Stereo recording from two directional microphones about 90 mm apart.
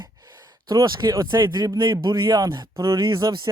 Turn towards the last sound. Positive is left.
turn(degrees=-40)  # may be behind; listen again after turning